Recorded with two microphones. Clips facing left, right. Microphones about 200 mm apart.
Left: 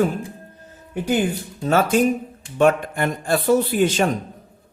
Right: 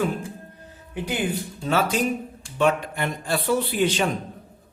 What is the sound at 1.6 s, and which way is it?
Speech, 50° left (ahead or behind).